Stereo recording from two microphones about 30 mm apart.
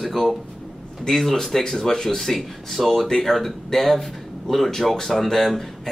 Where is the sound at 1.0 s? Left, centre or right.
Centre.